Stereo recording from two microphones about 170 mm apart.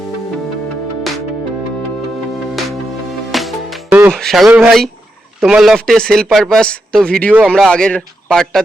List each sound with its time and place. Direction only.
3.3 s music: centre (ahead or behind)
4.1 s a man's voice: centre (ahead or behind)